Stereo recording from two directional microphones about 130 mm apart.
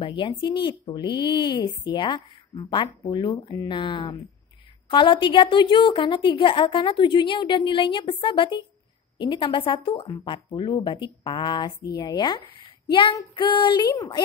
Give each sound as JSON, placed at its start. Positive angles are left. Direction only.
{"t": 0.0, "sound": "speech", "side_deg": 40}